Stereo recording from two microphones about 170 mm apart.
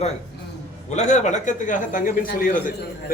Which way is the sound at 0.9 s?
45° left (ahead or behind).